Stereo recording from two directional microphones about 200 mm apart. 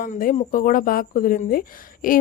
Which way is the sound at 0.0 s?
45° left (ahead or behind).